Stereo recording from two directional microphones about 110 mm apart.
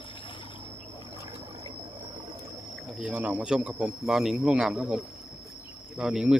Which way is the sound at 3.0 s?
15° right (ahead or behind).